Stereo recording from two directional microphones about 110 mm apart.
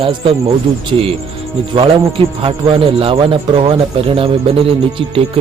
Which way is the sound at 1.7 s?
55° right (ahead or behind).